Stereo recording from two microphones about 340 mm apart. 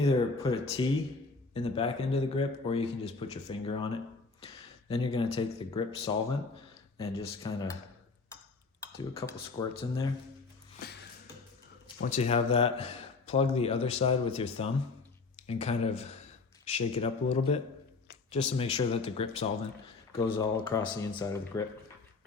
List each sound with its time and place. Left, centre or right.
0.0 s a man's voice: centre
4.9 s a man's voice: centre
8.8 s a man's voice: centre
11.9 s a man's voice: left